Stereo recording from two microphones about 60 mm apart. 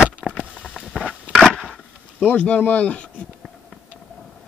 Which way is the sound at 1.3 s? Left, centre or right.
Centre.